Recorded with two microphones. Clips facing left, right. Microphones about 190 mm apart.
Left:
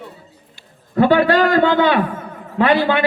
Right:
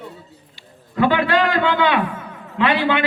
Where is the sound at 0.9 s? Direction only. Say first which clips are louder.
Left 4 dB; 40° left (ahead or behind).